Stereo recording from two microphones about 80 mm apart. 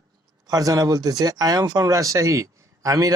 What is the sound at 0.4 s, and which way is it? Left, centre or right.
Speech, right.